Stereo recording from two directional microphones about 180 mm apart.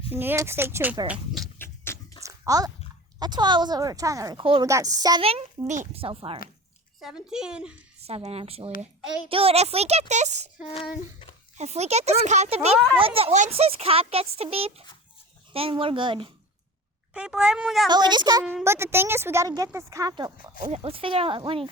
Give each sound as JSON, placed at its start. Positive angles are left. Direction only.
{"t": 0.1, "sound": "a woman's voice", "side_deg": -10}
{"t": 1.0, "sound": "a sound", "side_deg": -5}
{"t": 1.5, "sound": "a sound", "side_deg": 15}
{"t": 2.2, "sound": "dog", "side_deg": -20}
{"t": 3.2, "sound": "speech", "side_deg": -25}
{"t": 5.2, "sound": "speech", "side_deg": -35}
{"t": 7.0, "sound": "speech", "side_deg": -5}
{"t": 8.0, "sound": "speech", "side_deg": -35}
{"t": 11.5, "sound": "speech", "side_deg": -40}
{"t": 17.2, "sound": "speech", "side_deg": -5}
{"t": 17.8, "sound": "a woman's voice", "side_deg": -25}
{"t": 20.7, "sound": "speech", "side_deg": -35}